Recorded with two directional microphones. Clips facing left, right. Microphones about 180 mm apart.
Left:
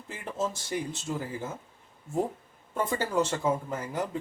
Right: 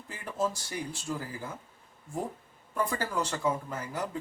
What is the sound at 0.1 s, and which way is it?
Speech, 25° left (ahead or behind).